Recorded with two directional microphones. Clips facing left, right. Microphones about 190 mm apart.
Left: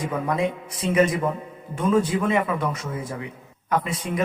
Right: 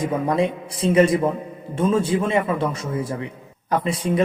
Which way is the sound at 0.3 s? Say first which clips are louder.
Right 4 dB; 30° right (ahead or behind).